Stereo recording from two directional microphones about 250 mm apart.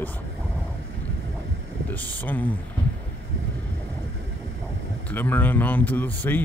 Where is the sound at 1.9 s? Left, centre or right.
Centre.